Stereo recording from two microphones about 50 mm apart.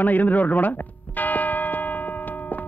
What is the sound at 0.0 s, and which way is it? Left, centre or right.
Speech, left.